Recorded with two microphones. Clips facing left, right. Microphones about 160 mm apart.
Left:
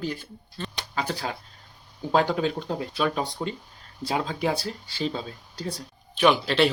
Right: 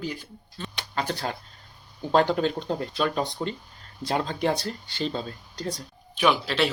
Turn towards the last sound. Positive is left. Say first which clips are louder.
# left 3 dB
turn(degrees=0)  # may be behind; listen again after turning